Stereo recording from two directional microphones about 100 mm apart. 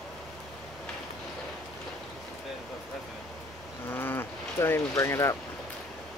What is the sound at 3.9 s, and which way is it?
Livestock, 20° left (ahead or behind).